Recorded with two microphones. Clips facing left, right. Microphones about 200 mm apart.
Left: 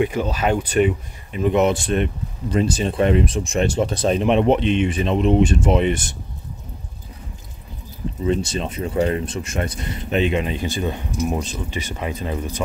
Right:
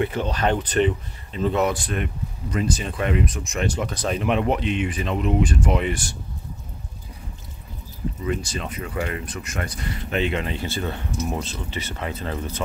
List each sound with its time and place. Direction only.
0.0 s speech: 10° left (ahead or behind)
8.2 s speech: 25° left (ahead or behind)